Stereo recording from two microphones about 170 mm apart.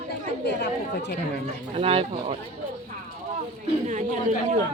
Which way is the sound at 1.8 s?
35° right (ahead or behind).